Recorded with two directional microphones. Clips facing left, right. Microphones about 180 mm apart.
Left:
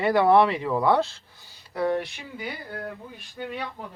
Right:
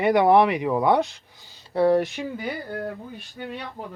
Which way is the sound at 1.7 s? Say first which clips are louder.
Right 6 dB; 35° right (ahead or behind).